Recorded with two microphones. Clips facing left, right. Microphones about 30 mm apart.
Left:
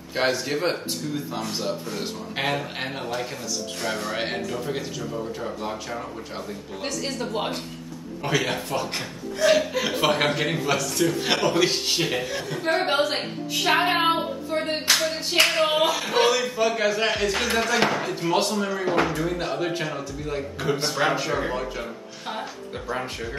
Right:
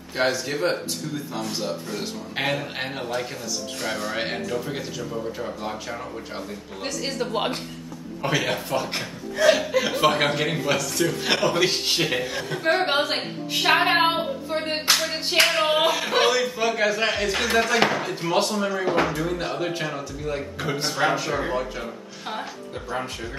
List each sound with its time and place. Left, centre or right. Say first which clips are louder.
0.1 s speech: even; centre
2.0 s a man's voice: even; centre
7.1 s speech: right 4 dB; right
8.2 s a man's voice: right 1 dB; centre
12.2 s a woman's voice: right 1 dB; right
13.0 s a woman's voice: left 1 dB; right
13.7 s clapping: even; right
15.4 s speech: even; right
15.8 s a man's voice: even; centre